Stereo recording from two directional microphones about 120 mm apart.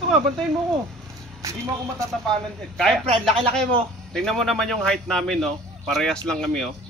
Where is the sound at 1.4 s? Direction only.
25° right (ahead or behind).